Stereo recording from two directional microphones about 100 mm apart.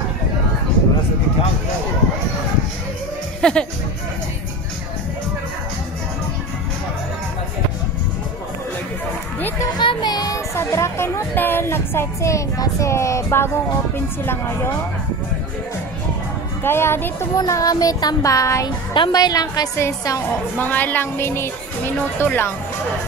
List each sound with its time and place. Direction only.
3.3 s speech: 10° left (ahead or behind)
9.8 s a woman's voice: 50° left (ahead or behind); by 14.7 s 20° left (ahead or behind)
16.6 s a woman's voice: 25° left (ahead or behind)
17.4 s child singing: 35° left (ahead or behind)
19.8 s a woman's voice: 25° left (ahead or behind)